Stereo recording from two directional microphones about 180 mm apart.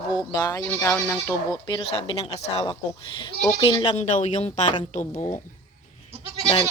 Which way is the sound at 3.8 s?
40° left (ahead or behind).